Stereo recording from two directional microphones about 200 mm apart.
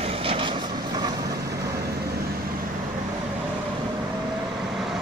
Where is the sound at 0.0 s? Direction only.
25° right (ahead or behind).